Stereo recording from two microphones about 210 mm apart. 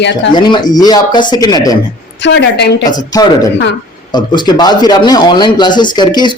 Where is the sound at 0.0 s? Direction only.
55° left (ahead or behind).